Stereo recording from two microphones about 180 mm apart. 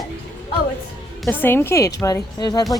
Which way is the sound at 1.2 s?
10° left (ahead or behind).